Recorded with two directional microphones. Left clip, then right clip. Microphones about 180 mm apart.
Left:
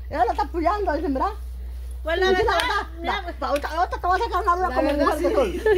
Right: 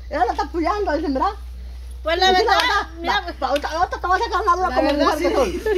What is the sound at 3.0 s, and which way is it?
Speech, 25° right (ahead or behind).